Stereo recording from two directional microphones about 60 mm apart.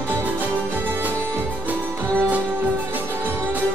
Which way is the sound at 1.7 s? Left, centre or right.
Right.